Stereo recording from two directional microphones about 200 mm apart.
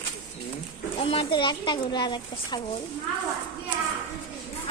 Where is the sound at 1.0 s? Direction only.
25° left (ahead or behind).